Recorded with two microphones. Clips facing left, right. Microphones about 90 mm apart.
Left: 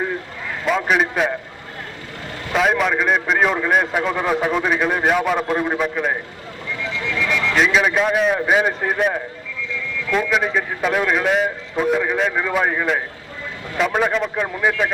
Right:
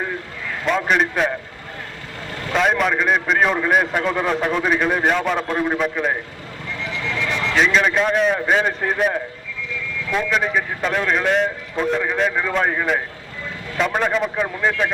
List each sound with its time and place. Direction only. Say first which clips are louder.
0.6 s a man's voice: even; centre (ahead or behind)
2.5 s a man's voice: even; centre (ahead or behind)
7.5 s a man's voice: even; 5° left (ahead or behind)